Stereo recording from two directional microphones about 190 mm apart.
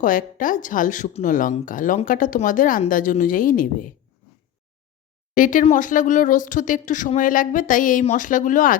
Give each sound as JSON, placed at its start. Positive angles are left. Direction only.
{"t": 0.0, "sound": "speech", "side_deg": 45}
{"t": 5.3, "sound": "speech", "side_deg": 45}